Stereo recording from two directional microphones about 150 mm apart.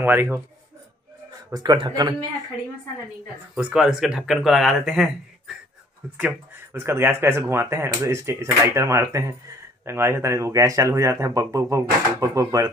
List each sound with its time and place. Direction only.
0.0 s speech: 15° right (ahead or behind)
1.5 s speech: 30° right (ahead or behind)
3.5 s speech: 5° right (ahead or behind)
6.1 s speech: 15° right (ahead or behind)